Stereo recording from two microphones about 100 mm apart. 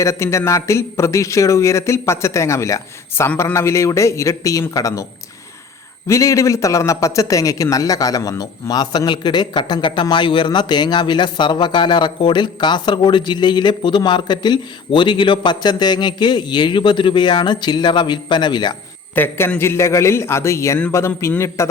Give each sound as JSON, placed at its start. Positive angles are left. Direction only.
{"t": 0.0, "sound": "a man's voice", "side_deg": 30}
{"t": 6.1, "sound": "a man's voice", "side_deg": 30}
{"t": 19.1, "sound": "a man's voice", "side_deg": 20}